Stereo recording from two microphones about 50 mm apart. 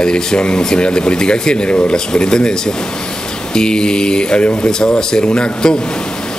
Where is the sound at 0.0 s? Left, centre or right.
Centre.